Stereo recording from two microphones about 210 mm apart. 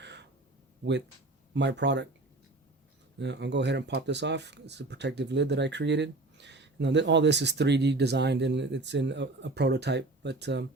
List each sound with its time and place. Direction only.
0.0 s gasp: 55° right (ahead or behind)
1.5 s speech: 55° right (ahead or behind)
3.2 s speech: 55° right (ahead or behind)